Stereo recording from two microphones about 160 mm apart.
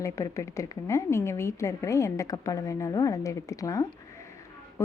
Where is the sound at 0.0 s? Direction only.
20° left (ahead or behind).